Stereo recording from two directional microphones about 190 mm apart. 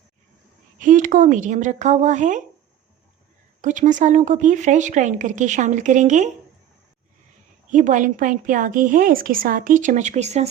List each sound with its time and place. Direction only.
0.8 s a woman's voice: 45° right (ahead or behind)
3.6 s a woman's voice: 40° right (ahead or behind)
7.7 s a woman's voice: 40° right (ahead or behind)